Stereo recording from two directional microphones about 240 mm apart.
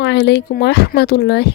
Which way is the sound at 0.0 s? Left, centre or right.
Left.